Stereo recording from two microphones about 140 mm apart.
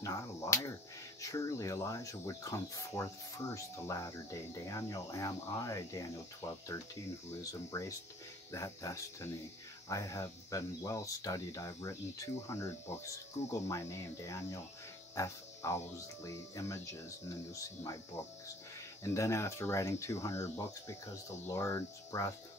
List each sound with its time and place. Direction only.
0.0 s speech: 20° left (ahead or behind)
8.5 s speech: 20° left (ahead or behind)
15.1 s cricket: 20° left (ahead or behind)
16.3 s speech: 20° left (ahead or behind)